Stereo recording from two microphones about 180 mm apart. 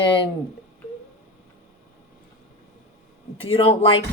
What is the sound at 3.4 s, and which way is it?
Speech, 30° left (ahead or behind).